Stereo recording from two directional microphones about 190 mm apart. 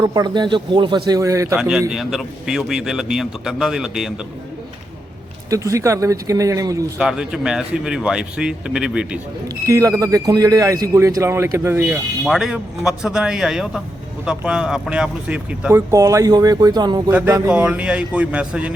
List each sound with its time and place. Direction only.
0.0 s a man's voice: 20° right (ahead or behind)
1.5 s a man's voice: 5° right (ahead or behind)
5.5 s speech: 15° right (ahead or behind)
7.0 s a man's voice: 5° right (ahead or behind)
9.6 s a man's voice: 15° right (ahead or behind)
17.1 s speech: 10° right (ahead or behind)